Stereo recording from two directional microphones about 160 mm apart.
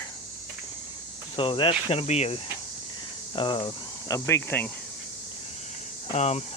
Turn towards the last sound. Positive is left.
turn(degrees=40)  # may be behind; listen again after turning